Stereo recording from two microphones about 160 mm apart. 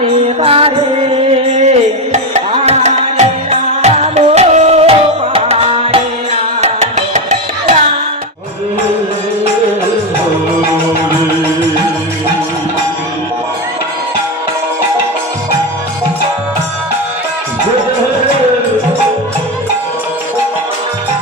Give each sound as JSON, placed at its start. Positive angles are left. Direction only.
{"t": 0.0, "sound": "music", "side_deg": -35}